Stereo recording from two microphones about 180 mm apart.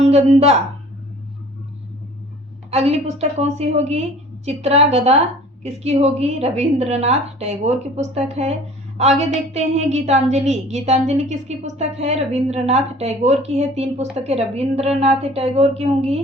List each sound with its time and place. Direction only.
0.0 s a woman's voice: 35° right (ahead or behind)
2.6 s a woman's voice: 35° right (ahead or behind)